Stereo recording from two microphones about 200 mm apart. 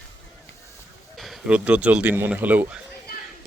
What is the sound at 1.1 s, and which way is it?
Speech, centre (ahead or behind).